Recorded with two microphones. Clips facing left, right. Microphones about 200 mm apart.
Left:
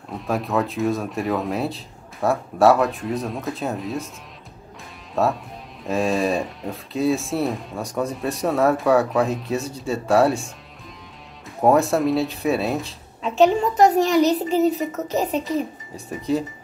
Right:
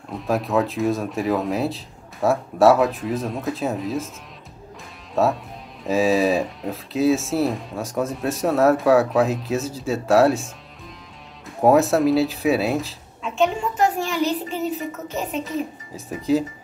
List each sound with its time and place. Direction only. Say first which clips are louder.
0.1 s speech: right 2 dB; centre (ahead or behind)
5.1 s speech: right 1 dB; centre (ahead or behind)
13.2 s a woman's voice: left 5 dB; 35° left (ahead or behind)
16.1 s speech: right 3 dB; centre (ahead or behind)